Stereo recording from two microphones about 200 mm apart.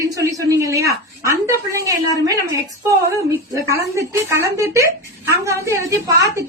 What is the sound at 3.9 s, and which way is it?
Speech, 15° right (ahead or behind).